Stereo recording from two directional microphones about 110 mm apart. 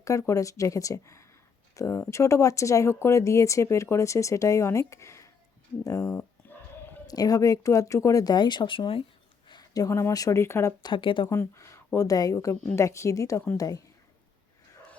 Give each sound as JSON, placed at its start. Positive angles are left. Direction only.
{"t": 0.0, "sound": "speech", "side_deg": 30}
{"t": 5.8, "sound": "a sound", "side_deg": 25}
{"t": 7.1, "sound": "speech", "side_deg": 35}
{"t": 9.5, "sound": "speech", "side_deg": 35}
{"t": 10.8, "sound": "speech", "side_deg": 50}
{"t": 11.3, "sound": "speech", "side_deg": 25}